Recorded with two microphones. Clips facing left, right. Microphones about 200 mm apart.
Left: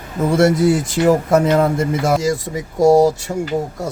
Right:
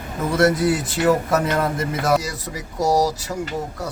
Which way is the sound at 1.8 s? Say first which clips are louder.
Left 3 dB; 25° left (ahead or behind).